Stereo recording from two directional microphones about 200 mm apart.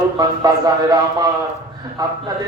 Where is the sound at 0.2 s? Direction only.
20° right (ahead or behind).